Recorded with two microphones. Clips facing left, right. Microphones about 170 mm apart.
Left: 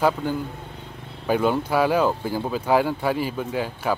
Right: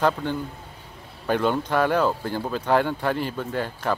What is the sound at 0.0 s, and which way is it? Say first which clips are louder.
Speech: left 1 dB; 5° left (ahead or behind).